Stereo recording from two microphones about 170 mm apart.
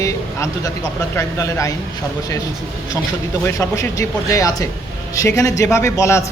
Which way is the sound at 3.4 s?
15° left (ahead or behind).